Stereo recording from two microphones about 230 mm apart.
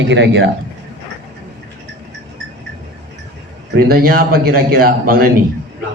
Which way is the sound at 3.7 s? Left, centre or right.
Right.